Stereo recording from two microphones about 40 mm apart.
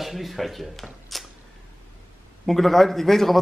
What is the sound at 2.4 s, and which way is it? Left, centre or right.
Speech, centre.